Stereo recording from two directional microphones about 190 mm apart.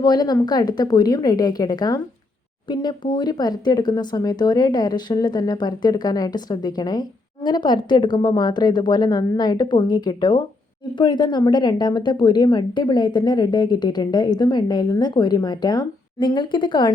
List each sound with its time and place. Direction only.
0.0 s a woman's voice: 20° left (ahead or behind)